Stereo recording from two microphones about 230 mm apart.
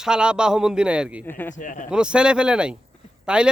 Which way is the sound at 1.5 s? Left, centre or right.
Left.